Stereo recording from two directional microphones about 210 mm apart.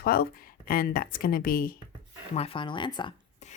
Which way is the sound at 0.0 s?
45° left (ahead or behind).